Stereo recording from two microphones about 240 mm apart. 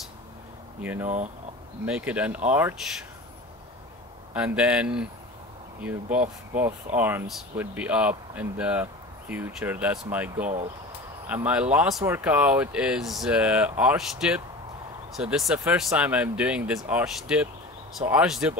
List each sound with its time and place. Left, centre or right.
1.0 s speech: right
1.9 s speech: centre
4.3 s speech: centre